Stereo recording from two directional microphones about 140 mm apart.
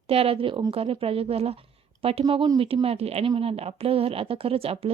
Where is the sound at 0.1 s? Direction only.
45° right (ahead or behind).